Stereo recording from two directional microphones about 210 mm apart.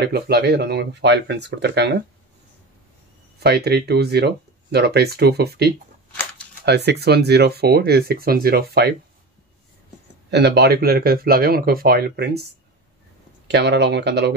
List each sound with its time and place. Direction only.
0.0 s speech: 50° right (ahead or behind)
3.3 s speech: 50° right (ahead or behind)
10.3 s speech: 50° right (ahead or behind)
13.5 s speech: 55° right (ahead or behind)